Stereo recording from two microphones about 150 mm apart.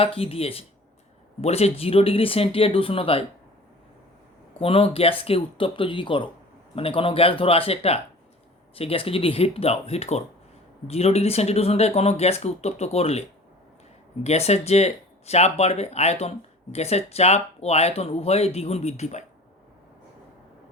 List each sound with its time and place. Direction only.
0.0 s speech: 40° left (ahead or behind)
4.6 s speech: 40° left (ahead or behind)
14.3 s speech: 45° left (ahead or behind)